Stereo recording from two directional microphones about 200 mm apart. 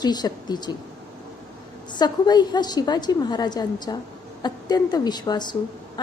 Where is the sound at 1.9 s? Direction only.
20° left (ahead or behind).